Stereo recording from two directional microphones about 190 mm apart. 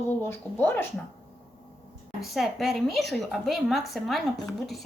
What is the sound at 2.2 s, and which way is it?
Speech, centre (ahead or behind).